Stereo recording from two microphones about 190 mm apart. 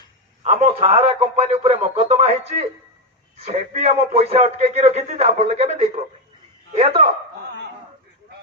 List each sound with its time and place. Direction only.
0.4 s a man's voice: 35° right (ahead or behind)
3.3 s a man's voice: 35° right (ahead or behind)